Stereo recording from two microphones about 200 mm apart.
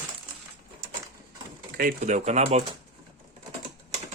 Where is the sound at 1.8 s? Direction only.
40° right (ahead or behind).